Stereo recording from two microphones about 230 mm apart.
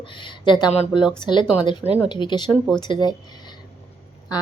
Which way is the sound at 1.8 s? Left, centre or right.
Centre.